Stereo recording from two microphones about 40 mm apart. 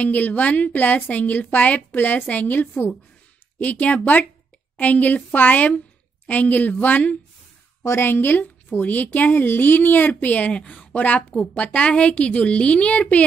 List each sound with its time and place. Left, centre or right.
0.0 s a woman's voice: left
3.5 s a woman's voice: left
7.9 s a woman's voice: left
8.7 s a woman's voice: left
10.5 s a woman's voice: left